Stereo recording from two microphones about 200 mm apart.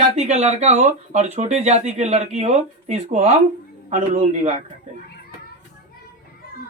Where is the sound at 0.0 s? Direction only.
35° right (ahead or behind).